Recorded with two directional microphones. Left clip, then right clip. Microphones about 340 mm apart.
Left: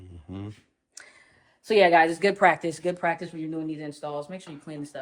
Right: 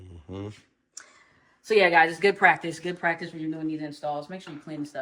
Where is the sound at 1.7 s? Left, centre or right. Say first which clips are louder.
Left 1 dB; left.